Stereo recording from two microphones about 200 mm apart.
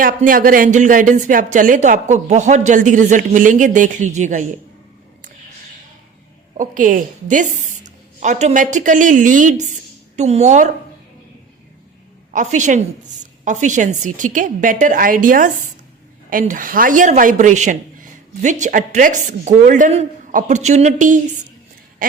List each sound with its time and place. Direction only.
0.0 s speech: 45° right (ahead or behind)
6.6 s speech: 40° right (ahead or behind)
12.3 s speech: 40° right (ahead or behind)